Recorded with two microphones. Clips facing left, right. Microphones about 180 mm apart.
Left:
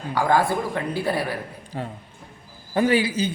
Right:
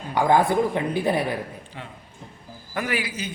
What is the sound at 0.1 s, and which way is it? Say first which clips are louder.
Speech: right 1 dB; 20° right (ahead or behind).